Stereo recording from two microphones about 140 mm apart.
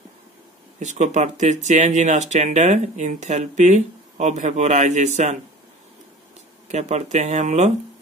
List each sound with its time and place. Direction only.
0.7 s speech: 60° right (ahead or behind)
6.7 s speech: 50° right (ahead or behind)